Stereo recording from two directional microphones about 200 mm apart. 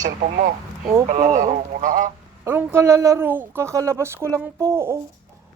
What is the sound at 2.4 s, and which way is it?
Speech, 10° right (ahead or behind).